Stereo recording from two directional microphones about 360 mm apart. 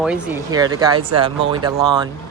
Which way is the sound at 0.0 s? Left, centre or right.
Centre.